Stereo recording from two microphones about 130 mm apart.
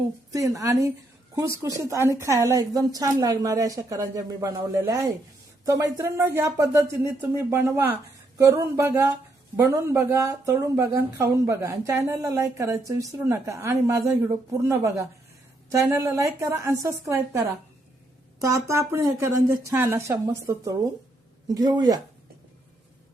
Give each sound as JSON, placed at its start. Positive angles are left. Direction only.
{"t": 0.3, "sound": "speech", "side_deg": -25}
{"t": 18.4, "sound": "speech", "side_deg": -20}